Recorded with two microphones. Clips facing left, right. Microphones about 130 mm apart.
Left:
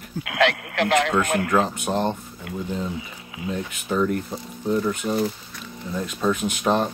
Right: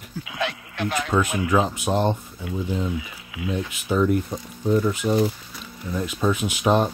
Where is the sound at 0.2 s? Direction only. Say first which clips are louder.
Left 8 dB; 80° left.